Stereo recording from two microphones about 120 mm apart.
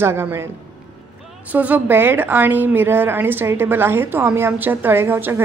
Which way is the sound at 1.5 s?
15° right (ahead or behind).